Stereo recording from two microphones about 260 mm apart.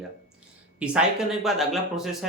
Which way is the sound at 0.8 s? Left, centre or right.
Centre.